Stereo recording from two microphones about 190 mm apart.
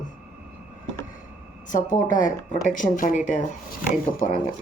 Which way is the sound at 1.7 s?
40° left (ahead or behind).